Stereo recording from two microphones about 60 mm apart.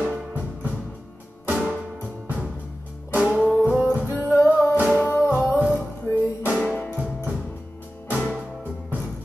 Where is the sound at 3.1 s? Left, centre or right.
Centre.